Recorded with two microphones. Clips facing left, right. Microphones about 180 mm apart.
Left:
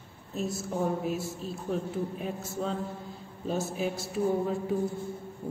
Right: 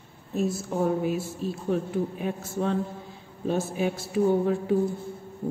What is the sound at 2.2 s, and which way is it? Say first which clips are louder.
Speech: right 5 dB; 60° right (ahead or behind).